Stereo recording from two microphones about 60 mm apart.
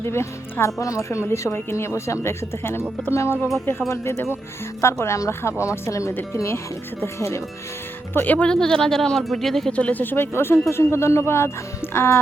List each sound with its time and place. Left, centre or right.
0.0 s a woman's voice: left
0.6 s a woman's voice: left
5.9 s a woman's voice: left
8.1 s speech: left
8.4 s speech: centre
9.7 s speech: left
10.0 s speech: left
10.3 s a woman's voice: left